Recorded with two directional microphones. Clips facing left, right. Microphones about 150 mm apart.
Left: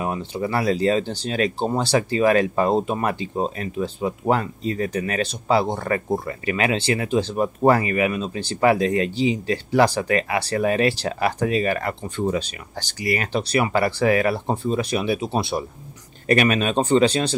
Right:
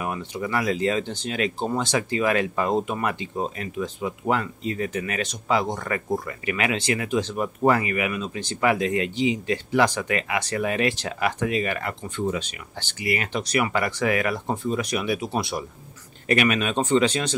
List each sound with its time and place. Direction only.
0.0 s speech: 30° left (ahead or behind)